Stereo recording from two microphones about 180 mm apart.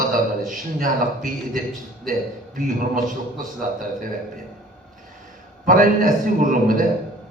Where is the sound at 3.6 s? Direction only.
50° right (ahead or behind).